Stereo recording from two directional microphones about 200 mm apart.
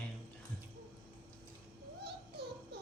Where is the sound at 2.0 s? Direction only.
55° right (ahead or behind).